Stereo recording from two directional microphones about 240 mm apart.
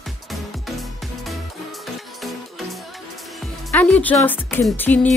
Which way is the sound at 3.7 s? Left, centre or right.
Centre.